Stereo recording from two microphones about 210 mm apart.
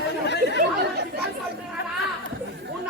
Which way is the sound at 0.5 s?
50° right (ahead or behind).